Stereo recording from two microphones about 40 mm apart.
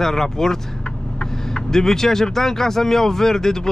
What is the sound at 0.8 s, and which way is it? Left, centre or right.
Vehicle, left.